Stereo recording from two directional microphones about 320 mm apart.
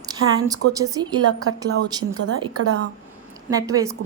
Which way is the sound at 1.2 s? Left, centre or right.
Right.